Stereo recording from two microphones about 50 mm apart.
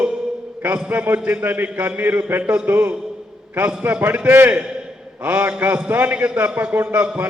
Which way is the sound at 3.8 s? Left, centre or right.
Right.